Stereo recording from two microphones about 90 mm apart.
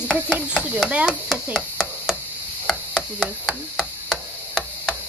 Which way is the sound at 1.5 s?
5° right (ahead or behind).